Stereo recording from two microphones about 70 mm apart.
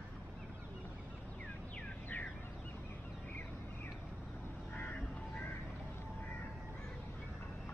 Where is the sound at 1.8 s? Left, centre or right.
Left.